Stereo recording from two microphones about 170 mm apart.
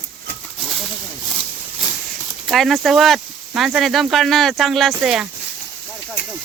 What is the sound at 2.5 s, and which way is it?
Speech, centre (ahead or behind).